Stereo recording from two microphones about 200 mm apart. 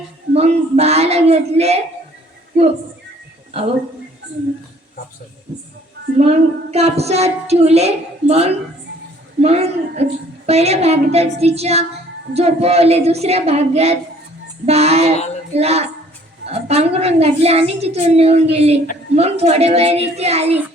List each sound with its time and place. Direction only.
0.3 s a woman's voice: 30° right (ahead or behind)
6.1 s a woman's voice: 30° right (ahead or behind)